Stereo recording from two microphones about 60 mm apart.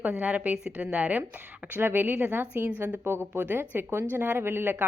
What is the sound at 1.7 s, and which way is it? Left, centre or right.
A woman's voice, right.